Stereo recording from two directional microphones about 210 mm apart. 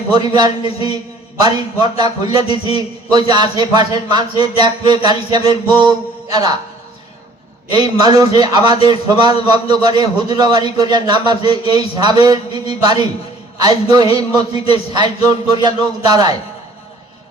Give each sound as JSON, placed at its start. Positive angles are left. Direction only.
{"t": 0.1, "sound": "a man's voice", "side_deg": -20}
{"t": 7.7, "sound": "a man's voice", "side_deg": -20}